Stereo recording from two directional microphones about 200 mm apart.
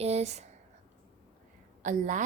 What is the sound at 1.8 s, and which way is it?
Speech, 40° right (ahead or behind).